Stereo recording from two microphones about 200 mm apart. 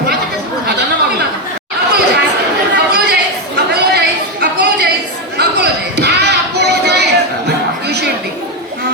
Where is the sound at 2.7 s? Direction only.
55° right (ahead or behind).